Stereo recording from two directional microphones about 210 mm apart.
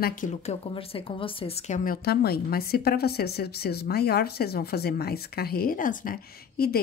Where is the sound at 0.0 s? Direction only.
40° left (ahead or behind).